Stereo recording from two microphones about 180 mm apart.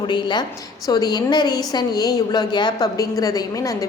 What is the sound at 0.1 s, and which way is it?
A woman's voice, 25° left (ahead or behind).